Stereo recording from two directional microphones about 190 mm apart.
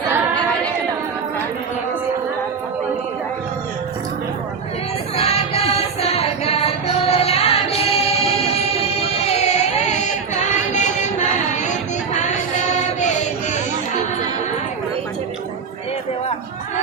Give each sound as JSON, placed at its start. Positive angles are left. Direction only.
{"t": 5.1, "sound": "music", "side_deg": 35}